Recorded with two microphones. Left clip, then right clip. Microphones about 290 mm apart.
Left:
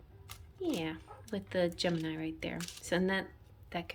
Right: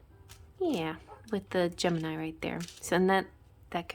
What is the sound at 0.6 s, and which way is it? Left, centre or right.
Speech, centre.